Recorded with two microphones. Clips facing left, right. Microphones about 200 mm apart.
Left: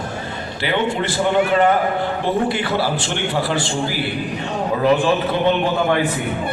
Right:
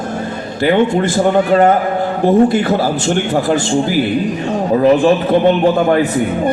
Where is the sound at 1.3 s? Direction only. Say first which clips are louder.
Right 3 dB; 40° right (ahead or behind).